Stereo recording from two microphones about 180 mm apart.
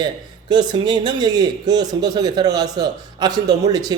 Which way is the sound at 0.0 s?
25° right (ahead or behind).